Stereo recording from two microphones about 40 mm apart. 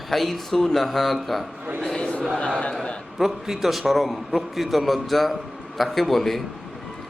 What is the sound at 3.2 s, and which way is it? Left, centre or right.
A man's voice, centre.